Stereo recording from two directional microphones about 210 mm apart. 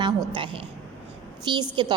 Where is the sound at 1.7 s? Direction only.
20° right (ahead or behind).